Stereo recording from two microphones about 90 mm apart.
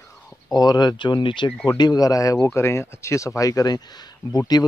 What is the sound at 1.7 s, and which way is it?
Speech, 45° left (ahead or behind).